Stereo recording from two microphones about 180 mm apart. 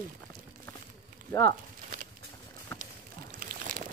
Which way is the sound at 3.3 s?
50° right (ahead or behind).